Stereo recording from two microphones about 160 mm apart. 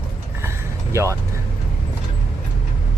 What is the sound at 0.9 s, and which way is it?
Speech, 15° right (ahead or behind).